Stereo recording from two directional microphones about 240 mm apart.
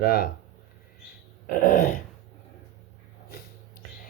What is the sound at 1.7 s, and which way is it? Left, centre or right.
Speech, left.